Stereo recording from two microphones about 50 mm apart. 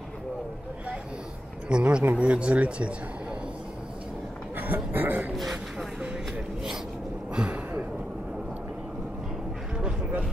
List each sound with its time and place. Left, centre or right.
1.7 s speech: right
4.6 s speech: right
5.5 s vehicle: right
7.3 s a sound: right
9.8 s vehicle: centre